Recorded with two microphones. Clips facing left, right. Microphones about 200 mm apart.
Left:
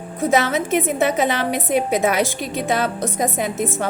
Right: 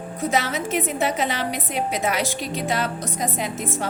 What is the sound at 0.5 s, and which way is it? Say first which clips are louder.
A woman's voice: left 5 dB; 50° left (ahead or behind).